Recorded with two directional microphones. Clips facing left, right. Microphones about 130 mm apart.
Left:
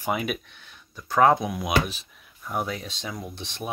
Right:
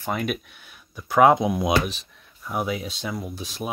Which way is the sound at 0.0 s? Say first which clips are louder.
Even; 5° left (ahead or behind).